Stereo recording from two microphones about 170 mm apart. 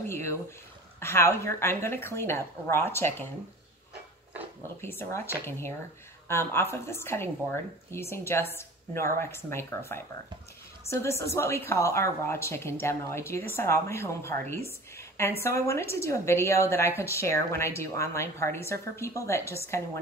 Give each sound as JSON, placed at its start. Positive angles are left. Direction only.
{"t": 0.0, "sound": "a woman's voice", "side_deg": 15}
{"t": 4.8, "sound": "a woman's voice", "side_deg": 15}